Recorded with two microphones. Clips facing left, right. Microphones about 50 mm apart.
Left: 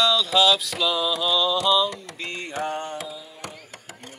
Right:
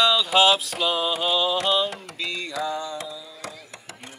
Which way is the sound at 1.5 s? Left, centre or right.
Right.